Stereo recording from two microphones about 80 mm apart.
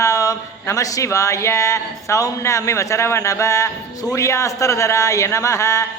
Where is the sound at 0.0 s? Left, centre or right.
Left.